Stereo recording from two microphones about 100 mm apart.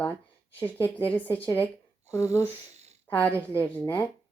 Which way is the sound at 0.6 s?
20° left (ahead or behind).